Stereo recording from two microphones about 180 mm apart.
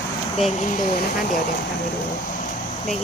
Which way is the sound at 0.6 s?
45° left (ahead or behind).